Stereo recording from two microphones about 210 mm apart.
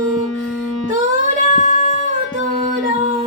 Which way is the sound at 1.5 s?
35° left (ahead or behind).